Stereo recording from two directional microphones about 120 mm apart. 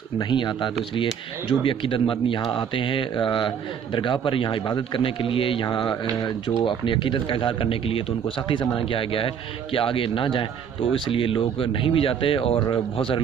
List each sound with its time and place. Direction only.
0.2 s speech: 40° left (ahead or behind)
12.5 s speech: 35° left (ahead or behind)
12.9 s speech: 50° left (ahead or behind)